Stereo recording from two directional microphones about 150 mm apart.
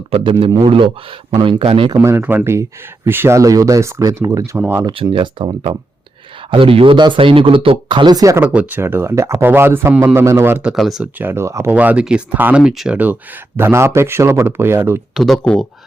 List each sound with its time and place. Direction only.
0.1 s speech: 35° right (ahead or behind)
2.0 s speech: 15° right (ahead or behind)
8.4 s speech: 10° right (ahead or behind)
15.1 s speech: centre (ahead or behind)